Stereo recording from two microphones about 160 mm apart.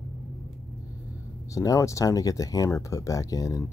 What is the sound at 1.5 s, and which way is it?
Speech, 20° left (ahead or behind).